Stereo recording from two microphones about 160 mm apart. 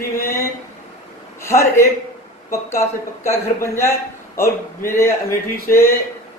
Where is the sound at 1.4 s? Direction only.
15° left (ahead or behind).